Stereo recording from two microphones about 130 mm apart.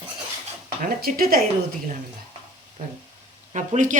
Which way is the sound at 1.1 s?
90° right.